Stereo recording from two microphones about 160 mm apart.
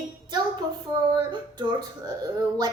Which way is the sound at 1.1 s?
25° right (ahead or behind).